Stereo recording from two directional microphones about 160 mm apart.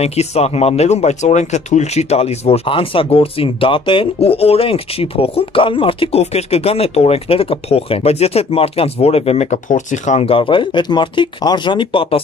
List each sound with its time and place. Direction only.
0.0 s speech: 40° left (ahead or behind)